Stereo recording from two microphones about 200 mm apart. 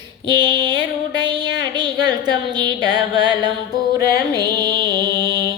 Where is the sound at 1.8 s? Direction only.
20° right (ahead or behind).